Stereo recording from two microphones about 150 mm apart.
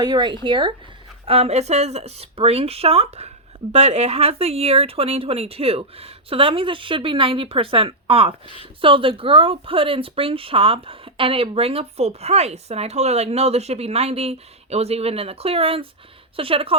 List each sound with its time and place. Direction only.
0.0 s speech: 30° right (ahead or behind)